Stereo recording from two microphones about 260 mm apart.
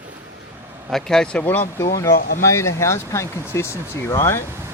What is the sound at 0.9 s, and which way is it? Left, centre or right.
Speech, centre.